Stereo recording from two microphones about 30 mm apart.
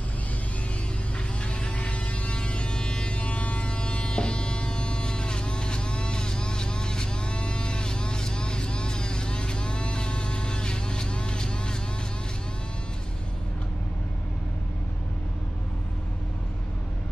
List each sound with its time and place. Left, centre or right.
1.4 s vehicle: left
2.4 s music: left
3.1 s a sound: left